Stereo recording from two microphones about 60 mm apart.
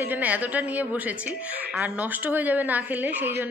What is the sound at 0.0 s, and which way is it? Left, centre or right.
A woman's voice, right.